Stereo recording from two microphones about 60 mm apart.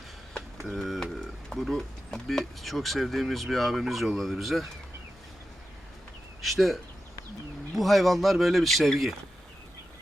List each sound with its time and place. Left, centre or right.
0.3 s a sound: centre
0.9 s speech: centre
6.4 s speech: centre
7.8 s speech: centre